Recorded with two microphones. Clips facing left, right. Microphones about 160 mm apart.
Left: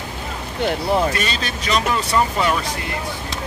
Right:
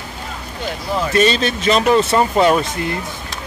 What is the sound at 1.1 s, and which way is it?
Speech, 25° right (ahead or behind).